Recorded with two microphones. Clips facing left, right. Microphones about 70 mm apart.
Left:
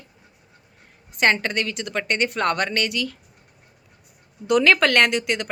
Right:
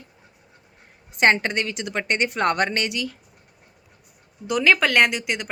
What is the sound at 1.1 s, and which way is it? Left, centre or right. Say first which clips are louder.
Speech: right 1 dB; right.